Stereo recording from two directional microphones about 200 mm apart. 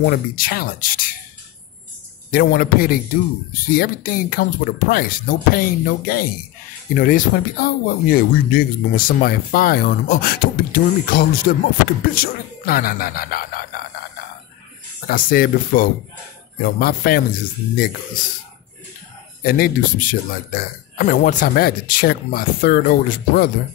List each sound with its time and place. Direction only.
0.0 s speech: 50° left (ahead or behind)
2.3 s speech: 50° left (ahead or behind)
15.0 s speech: 45° left (ahead or behind)
19.4 s speech: 45° left (ahead or behind)